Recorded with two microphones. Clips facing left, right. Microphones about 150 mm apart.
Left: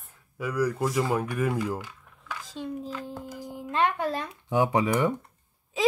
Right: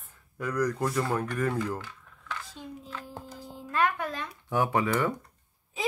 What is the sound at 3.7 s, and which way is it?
Speech, 30° left (ahead or behind).